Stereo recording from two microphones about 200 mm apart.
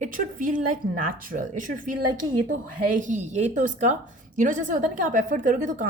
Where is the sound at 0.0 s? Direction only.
40° right (ahead or behind).